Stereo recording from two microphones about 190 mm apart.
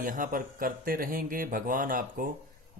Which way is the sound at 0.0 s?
45° right (ahead or behind).